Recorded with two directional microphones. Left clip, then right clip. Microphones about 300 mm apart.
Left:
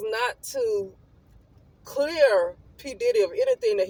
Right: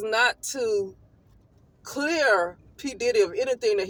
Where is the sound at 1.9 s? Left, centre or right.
Centre.